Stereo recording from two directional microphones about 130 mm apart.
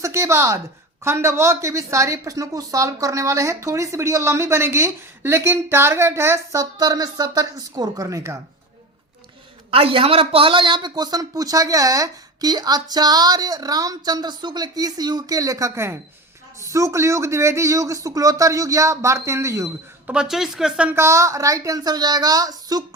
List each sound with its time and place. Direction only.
0.0 s a woman's voice: 20° right (ahead or behind)
9.7 s a woman's voice: 45° right (ahead or behind); by 20.1 s 25° right (ahead or behind)
20.1 s speech: 5° right (ahead or behind)
20.9 s a woman's voice: 20° right (ahead or behind)